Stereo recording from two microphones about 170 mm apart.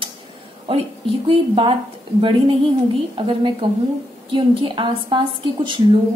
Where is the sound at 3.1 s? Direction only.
30° right (ahead or behind).